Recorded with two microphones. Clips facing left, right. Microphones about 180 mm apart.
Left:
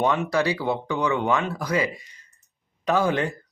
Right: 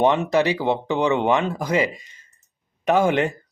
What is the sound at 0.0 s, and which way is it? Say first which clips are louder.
Speech: right 4 dB; 20° right (ahead or behind).